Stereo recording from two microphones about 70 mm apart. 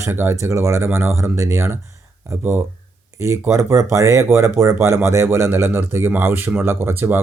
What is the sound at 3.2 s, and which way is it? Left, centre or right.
Speech, right.